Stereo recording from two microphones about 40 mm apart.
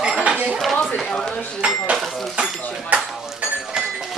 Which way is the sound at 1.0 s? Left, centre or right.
Centre.